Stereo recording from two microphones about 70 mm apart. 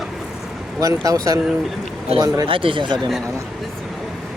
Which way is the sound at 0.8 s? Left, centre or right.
Right.